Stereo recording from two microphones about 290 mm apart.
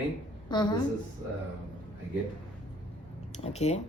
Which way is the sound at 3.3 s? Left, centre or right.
Left.